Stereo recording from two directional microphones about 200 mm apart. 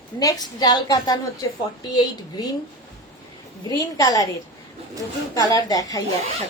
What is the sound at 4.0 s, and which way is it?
A woman's voice, 20° left (ahead or behind).